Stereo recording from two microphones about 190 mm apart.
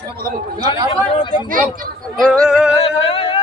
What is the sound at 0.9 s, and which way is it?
Speech, 25° left (ahead or behind).